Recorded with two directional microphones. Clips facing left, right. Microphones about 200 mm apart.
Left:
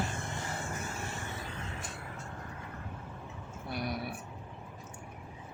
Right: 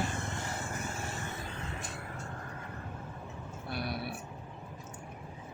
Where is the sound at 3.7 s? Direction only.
15° left (ahead or behind).